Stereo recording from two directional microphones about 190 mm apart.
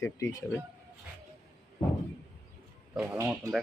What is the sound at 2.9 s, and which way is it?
Speech, 10° right (ahead or behind).